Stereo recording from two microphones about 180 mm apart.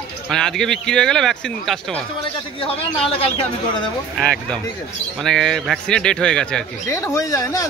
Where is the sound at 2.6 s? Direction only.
30° left (ahead or behind).